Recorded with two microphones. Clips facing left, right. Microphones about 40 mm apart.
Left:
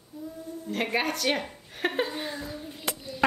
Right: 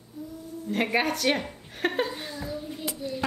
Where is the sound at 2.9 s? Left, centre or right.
Left.